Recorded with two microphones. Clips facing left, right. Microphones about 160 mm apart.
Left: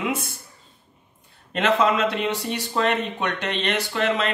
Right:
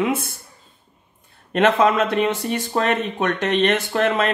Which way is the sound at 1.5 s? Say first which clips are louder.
Right 4 dB; 50° right (ahead or behind).